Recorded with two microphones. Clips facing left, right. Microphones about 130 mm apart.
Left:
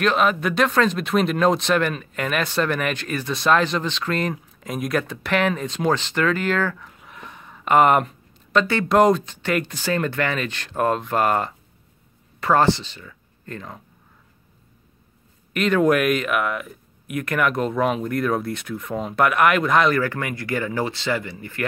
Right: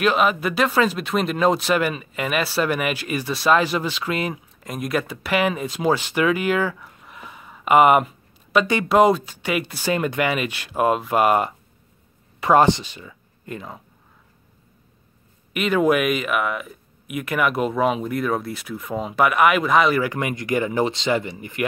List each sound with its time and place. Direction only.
0.0 s speech: 5° right (ahead or behind)
7.0 s a sound: centre (ahead or behind)
8.9 s speech: 5° right (ahead or behind)
15.5 s speech: 5° right (ahead or behind)
20.0 s speech: 15° right (ahead or behind)